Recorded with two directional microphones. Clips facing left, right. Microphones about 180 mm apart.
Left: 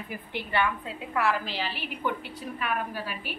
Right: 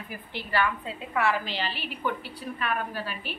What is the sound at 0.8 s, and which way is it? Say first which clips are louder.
A woman's voice: right 1 dB; centre (ahead or behind).